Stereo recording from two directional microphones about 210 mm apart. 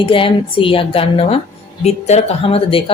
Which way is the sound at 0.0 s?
25° left (ahead or behind).